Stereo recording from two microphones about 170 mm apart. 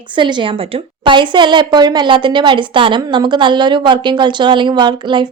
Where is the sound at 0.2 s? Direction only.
25° right (ahead or behind).